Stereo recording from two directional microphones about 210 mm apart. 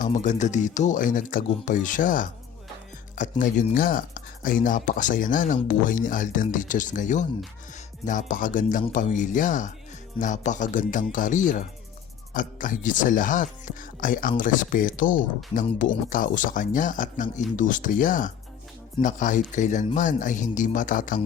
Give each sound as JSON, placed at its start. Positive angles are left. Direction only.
{"t": 0.0, "sound": "speech", "side_deg": 35}
{"t": 15.6, "sound": "speech", "side_deg": 25}
{"t": 16.0, "sound": "speech", "side_deg": 40}